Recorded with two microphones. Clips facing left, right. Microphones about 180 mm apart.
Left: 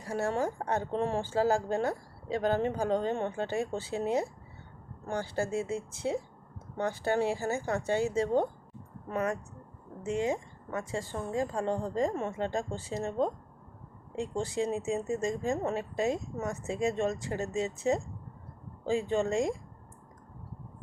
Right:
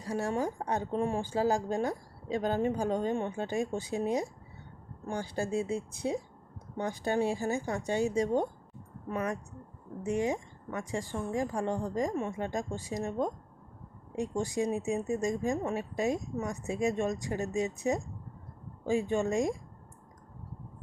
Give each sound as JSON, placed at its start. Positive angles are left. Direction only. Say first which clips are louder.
{"t": 0.0, "sound": "a woman's voice", "louder": "left 1 dB", "side_deg": -15}
{"t": 5.0, "sound": "a woman's voice", "louder": "left 1 dB", "side_deg": -15}
{"t": 10.0, "sound": "a woman's voice", "louder": "even", "side_deg": -15}